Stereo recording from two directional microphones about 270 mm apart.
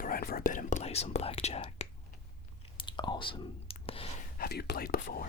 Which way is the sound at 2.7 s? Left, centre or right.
Centre.